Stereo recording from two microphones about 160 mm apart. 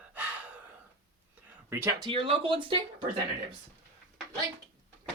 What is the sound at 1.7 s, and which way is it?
Speech, 20° right (ahead or behind).